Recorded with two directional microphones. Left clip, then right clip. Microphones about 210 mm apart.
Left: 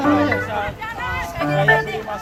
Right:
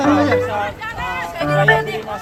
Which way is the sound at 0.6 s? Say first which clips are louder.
Right 2 dB; 35° right (ahead or behind).